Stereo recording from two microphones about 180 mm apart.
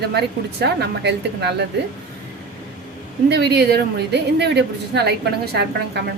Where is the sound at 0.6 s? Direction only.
70° right (ahead or behind).